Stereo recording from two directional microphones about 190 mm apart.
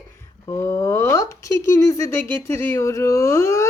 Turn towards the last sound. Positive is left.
turn(degrees=15)  # may be behind; listen again after turning